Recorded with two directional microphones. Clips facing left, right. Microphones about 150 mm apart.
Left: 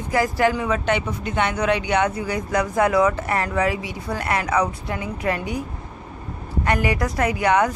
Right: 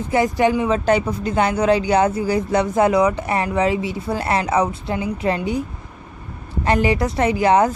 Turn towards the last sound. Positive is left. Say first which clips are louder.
# right 3 dB
turn(degrees=-30)  # may be behind; listen again after turning